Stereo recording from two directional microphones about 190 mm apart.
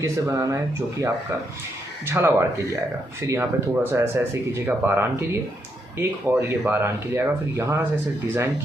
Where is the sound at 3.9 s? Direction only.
15° right (ahead or behind).